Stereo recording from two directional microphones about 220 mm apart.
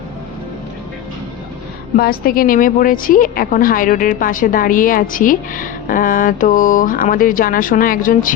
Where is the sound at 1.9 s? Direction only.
40° left (ahead or behind).